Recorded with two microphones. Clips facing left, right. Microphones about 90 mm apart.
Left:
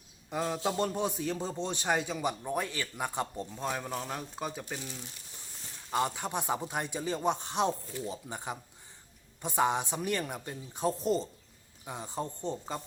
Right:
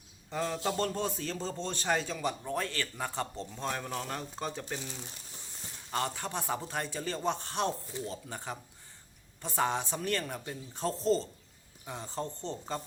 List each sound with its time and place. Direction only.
0.3 s a man's voice: 15° left (ahead or behind)
5.9 s a man's voice: 15° left (ahead or behind)